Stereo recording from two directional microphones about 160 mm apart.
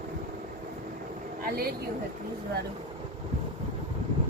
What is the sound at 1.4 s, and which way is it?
Speech, 70° right (ahead or behind).